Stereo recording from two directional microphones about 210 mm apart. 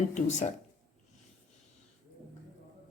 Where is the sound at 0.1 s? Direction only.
35° left (ahead or behind).